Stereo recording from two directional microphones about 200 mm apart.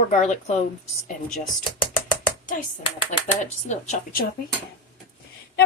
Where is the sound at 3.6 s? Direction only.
35° left (ahead or behind).